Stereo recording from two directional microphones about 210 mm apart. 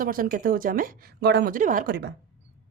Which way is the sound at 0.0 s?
40° right (ahead or behind).